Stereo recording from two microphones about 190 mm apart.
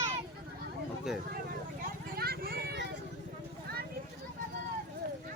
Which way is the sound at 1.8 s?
55° right (ahead or behind).